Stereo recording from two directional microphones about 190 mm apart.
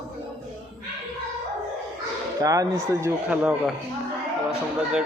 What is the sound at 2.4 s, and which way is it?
A man's voice, 15° right (ahead or behind).